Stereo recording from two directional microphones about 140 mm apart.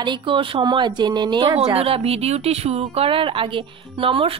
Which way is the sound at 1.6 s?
45° right (ahead or behind).